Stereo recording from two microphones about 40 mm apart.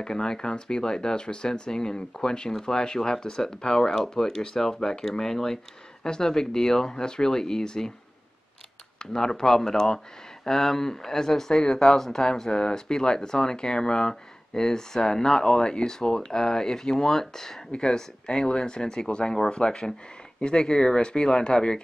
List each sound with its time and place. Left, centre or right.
0.0 s speech: centre
9.0 s speech: centre